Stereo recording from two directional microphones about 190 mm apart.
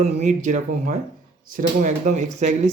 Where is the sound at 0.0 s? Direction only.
40° right (ahead or behind).